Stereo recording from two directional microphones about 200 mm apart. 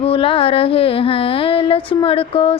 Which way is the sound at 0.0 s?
25° left (ahead or behind).